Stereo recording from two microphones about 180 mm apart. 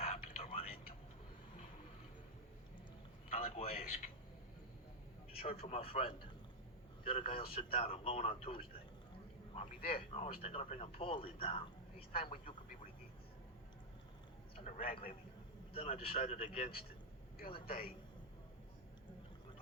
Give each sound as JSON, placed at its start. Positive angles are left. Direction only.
{"t": 0.0, "sound": "a sound", "side_deg": 35}
{"t": 3.3, "sound": "a sound", "side_deg": 35}
{"t": 5.3, "sound": "speech", "side_deg": 30}
{"t": 9.6, "sound": "a man's voice", "side_deg": 45}
{"t": 9.9, "sound": "speech", "side_deg": 30}
{"t": 14.5, "sound": "speech", "side_deg": 35}